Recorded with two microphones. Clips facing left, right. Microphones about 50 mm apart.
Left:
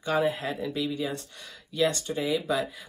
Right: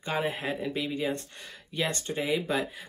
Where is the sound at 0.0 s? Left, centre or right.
Right.